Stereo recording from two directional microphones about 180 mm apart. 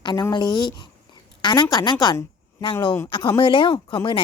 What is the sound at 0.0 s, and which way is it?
A woman's voice, 20° left (ahead or behind).